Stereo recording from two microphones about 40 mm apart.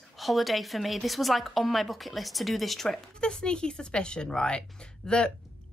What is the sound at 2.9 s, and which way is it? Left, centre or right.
A woman's voice, left.